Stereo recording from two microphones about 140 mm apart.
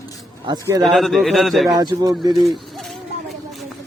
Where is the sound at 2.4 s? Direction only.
Centre (ahead or behind).